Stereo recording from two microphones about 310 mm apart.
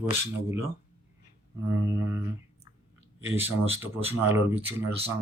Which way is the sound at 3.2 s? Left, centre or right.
Centre.